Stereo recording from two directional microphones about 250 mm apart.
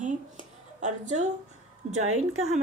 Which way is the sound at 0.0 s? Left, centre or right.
Right.